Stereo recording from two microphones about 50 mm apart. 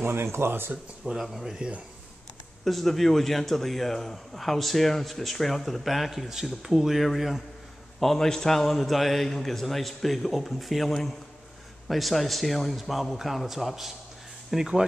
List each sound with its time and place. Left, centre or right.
0.0 s speech: right
1.1 s speech: centre
2.6 s speech: centre